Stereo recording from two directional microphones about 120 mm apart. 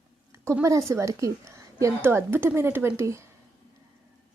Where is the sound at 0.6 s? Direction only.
25° right (ahead or behind).